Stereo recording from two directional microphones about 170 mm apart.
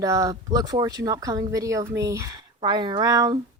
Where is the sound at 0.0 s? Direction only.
20° right (ahead or behind).